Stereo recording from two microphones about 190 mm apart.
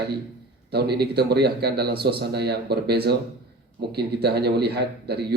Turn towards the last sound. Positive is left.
turn(degrees=-55)  # may be behind; listen again after turning